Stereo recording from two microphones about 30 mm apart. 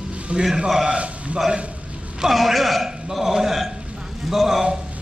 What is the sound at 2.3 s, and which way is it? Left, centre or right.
A man's voice, centre.